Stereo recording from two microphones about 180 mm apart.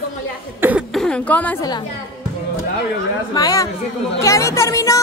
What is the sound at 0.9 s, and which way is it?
Speech, 5° left (ahead or behind).